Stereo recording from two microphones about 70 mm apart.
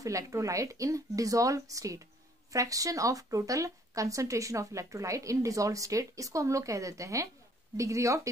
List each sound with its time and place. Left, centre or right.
0.0 s speech: right